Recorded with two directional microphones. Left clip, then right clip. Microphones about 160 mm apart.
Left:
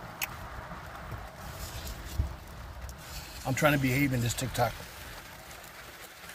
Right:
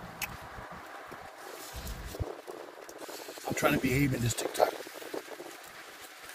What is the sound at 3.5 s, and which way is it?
Speech, 5° right (ahead or behind).